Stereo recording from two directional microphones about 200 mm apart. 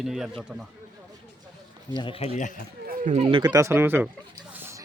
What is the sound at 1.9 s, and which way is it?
Speech, 25° left (ahead or behind).